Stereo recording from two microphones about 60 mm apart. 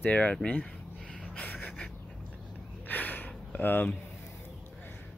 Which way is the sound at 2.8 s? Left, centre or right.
Left.